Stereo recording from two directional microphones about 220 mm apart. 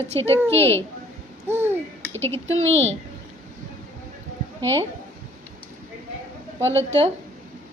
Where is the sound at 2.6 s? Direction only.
60° right (ahead or behind).